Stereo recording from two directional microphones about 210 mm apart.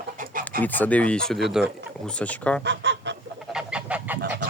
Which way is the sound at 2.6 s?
55° right (ahead or behind).